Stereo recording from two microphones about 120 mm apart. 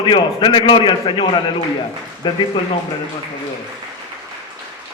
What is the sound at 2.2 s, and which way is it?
Speech, 45° left (ahead or behind).